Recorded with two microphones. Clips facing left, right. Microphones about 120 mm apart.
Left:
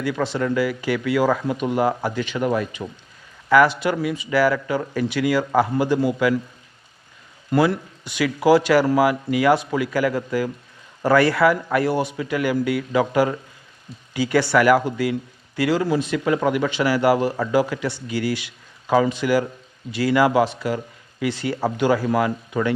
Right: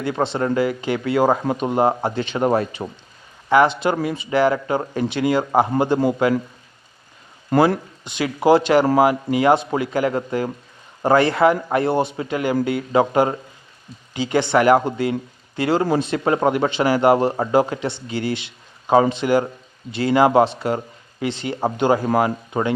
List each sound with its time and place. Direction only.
0.0 s speech: 25° right (ahead or behind)
7.5 s speech: 45° right (ahead or behind)
8.0 s speech: 25° right (ahead or behind)